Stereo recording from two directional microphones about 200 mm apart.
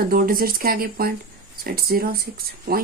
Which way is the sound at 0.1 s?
45° right (ahead or behind).